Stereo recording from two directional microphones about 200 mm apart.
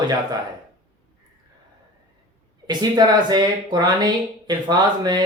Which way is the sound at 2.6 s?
20° right (ahead or behind).